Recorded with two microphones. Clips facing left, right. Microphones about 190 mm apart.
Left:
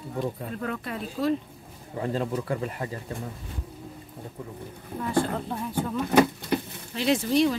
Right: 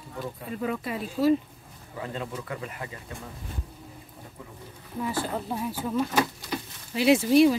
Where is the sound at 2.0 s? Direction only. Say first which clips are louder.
Left 7 dB; 35° left (ahead or behind).